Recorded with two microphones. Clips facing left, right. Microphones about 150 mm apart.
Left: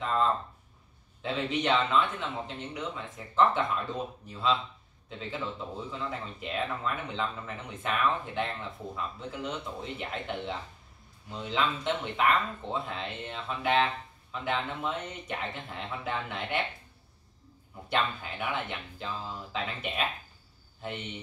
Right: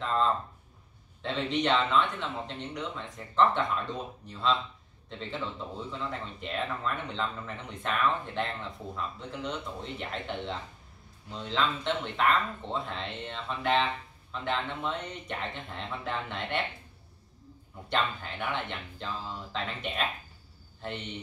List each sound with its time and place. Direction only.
0.0 s speech: 5° left (ahead or behind)
17.8 s speech: 5° left (ahead or behind)